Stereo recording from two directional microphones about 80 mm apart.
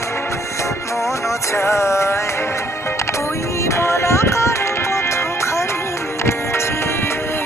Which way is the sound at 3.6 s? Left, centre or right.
Left.